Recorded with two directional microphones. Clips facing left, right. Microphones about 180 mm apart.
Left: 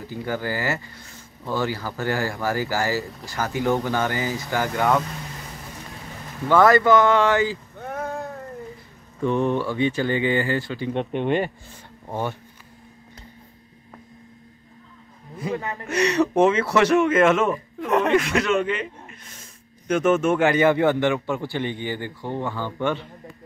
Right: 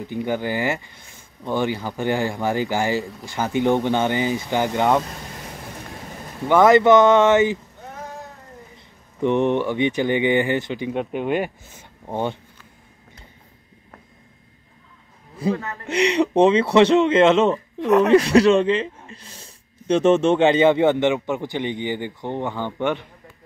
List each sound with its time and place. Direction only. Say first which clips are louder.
0.0 s speech: right 4 dB; 20° right (ahead or behind)
6.4 s speech: right 3 dB; 20° right (ahead or behind)
7.8 s a sound: left 6 dB; 60° left (ahead or behind)
9.2 s speech: right 3 dB; 20° right (ahead or behind)
10.9 s speech: left 1 dB; 5° right (ahead or behind)
12.1 s speech: right 3 dB; 20° right (ahead or behind)
15.5 s a man's voice: even; 15° left (ahead or behind)
16.2 s speech: right 3 dB; 20° right (ahead or behind)
17.7 s speech: right 5 dB; centre (ahead or behind)
18.1 s speech: right 6 dB; 35° right (ahead or behind); by 23.0 s 20° right (ahead or behind)